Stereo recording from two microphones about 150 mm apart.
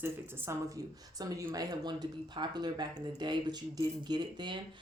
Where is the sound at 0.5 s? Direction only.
20° right (ahead or behind).